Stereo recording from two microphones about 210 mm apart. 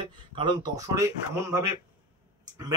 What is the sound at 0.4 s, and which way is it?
Speech, 20° right (ahead or behind).